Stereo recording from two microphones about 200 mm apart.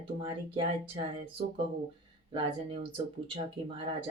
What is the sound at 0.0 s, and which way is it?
Speech, 25° right (ahead or behind).